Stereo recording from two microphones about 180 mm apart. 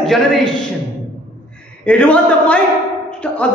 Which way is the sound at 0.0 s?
Centre (ahead or behind).